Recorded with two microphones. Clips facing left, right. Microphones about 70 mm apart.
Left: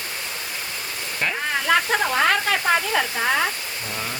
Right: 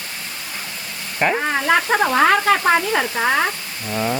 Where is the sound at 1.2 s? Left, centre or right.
Right.